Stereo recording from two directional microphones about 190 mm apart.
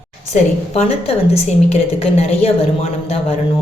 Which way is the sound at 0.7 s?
30° left (ahead or behind).